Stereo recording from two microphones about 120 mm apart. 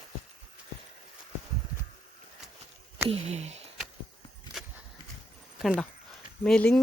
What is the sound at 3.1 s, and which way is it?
Speech, 65° right (ahead or behind).